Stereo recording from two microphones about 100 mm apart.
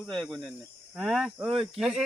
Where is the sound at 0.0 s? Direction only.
5° left (ahead or behind).